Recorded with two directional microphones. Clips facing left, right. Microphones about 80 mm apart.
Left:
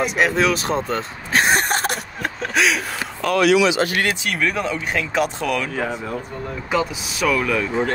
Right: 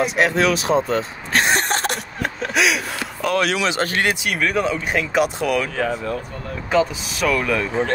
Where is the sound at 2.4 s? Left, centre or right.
Centre.